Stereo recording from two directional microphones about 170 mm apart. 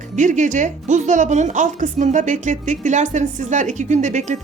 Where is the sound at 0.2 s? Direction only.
45° right (ahead or behind).